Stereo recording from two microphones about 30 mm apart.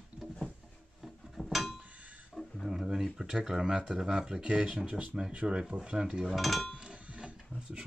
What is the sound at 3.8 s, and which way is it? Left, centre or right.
Speech, centre.